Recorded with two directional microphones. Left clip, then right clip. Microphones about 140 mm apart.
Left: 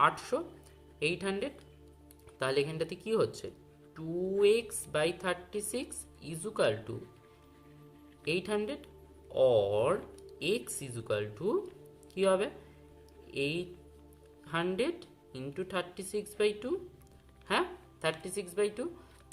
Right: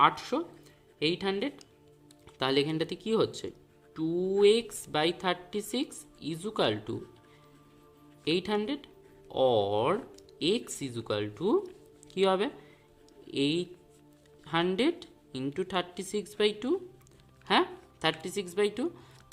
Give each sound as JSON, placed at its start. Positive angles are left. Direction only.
{"t": 0.0, "sound": "a woman's voice", "side_deg": -45}
{"t": 2.4, "sound": "a woman's voice", "side_deg": -60}
{"t": 8.2, "sound": "a woman's voice", "side_deg": -55}